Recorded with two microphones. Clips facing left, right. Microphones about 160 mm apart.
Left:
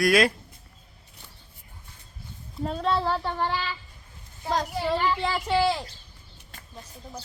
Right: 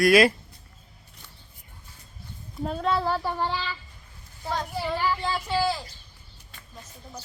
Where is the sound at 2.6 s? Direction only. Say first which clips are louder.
Even; centre (ahead or behind).